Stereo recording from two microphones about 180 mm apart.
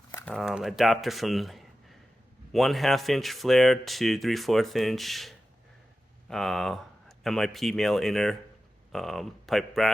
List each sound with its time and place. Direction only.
0.1 s speech: 5° left (ahead or behind)